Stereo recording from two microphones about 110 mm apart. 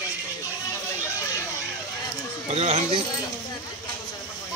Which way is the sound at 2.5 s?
70° right (ahead or behind).